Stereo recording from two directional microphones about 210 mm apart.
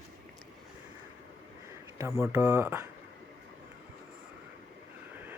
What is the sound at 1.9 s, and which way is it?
Speech, 15° right (ahead or behind).